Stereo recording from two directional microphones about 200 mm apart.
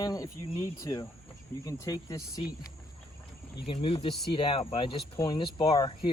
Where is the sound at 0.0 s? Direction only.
20° left (ahead or behind).